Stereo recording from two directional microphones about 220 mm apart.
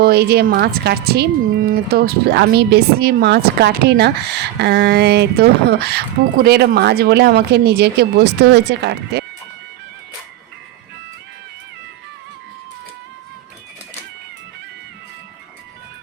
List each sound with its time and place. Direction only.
0.0 s speech: 45° right (ahead or behind)